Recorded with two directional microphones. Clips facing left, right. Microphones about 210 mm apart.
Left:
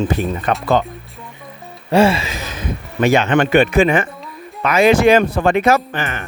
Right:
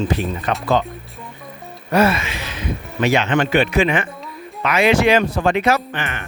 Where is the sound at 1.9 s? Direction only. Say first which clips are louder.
Left 3 dB; 30° left (ahead or behind).